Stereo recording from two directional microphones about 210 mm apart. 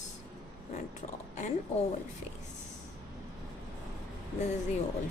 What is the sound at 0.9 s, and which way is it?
Speech, 35° left (ahead or behind).